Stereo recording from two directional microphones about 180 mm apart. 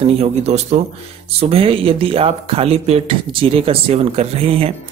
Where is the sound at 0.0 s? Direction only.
35° right (ahead or behind).